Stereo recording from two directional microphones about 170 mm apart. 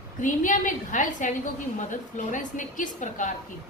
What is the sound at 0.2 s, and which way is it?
A woman's voice, 50° left (ahead or behind).